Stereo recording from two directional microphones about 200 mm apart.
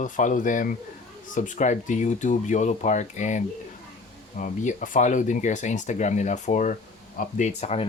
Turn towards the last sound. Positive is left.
turn(degrees=30)  # may be behind; listen again after turning